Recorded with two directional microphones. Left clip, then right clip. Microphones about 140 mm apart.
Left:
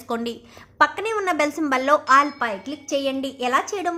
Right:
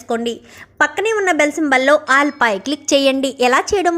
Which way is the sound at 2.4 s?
65° right (ahead or behind).